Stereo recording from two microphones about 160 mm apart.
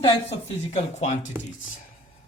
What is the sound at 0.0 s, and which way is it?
Speech, 40° left (ahead or behind).